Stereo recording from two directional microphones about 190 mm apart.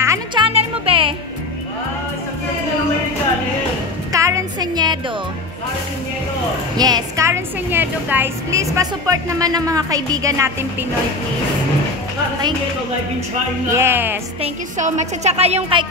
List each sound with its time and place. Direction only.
0.0 s music: 20° right (ahead or behind)
4.1 s a sound: 15° right (ahead or behind)
6.8 s a woman's voice: 20° right (ahead or behind)
13.7 s a woman's voice: 10° right (ahead or behind)
14.4 s a woman's voice: 35° right (ahead or behind)